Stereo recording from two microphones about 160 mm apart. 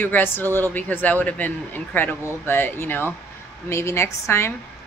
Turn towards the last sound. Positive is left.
turn(degrees=15)  # may be behind; listen again after turning